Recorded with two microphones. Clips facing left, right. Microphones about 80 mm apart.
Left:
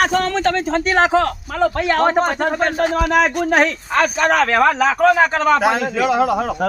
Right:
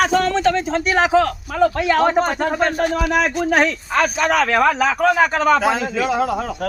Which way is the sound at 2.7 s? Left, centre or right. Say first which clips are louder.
Left 2 dB; left.